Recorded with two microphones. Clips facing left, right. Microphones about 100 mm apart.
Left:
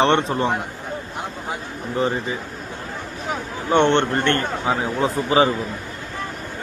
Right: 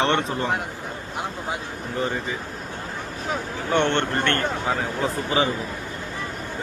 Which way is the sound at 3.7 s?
25° left (ahead or behind).